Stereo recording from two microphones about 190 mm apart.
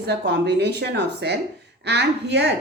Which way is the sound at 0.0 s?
60° right (ahead or behind).